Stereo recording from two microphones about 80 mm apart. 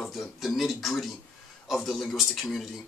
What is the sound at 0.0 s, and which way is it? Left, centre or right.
Speech, centre.